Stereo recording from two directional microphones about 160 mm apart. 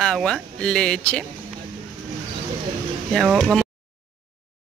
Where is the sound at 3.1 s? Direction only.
Centre (ahead or behind).